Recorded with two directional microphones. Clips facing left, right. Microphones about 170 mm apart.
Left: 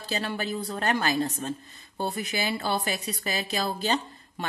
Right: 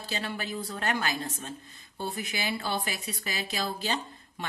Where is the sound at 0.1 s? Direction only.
35° left (ahead or behind).